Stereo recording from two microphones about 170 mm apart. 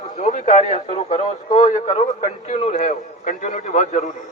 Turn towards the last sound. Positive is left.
turn(degrees=45)  # may be behind; listen again after turning